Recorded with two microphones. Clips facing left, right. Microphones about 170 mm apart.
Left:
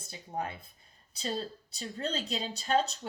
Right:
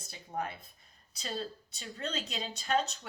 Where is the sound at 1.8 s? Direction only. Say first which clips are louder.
Left 3 dB; 35° left (ahead or behind).